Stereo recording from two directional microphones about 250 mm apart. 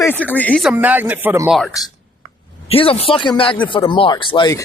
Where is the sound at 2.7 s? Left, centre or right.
Left.